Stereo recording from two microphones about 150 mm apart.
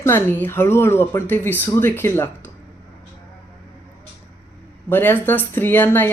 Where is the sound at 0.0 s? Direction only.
15° left (ahead or behind).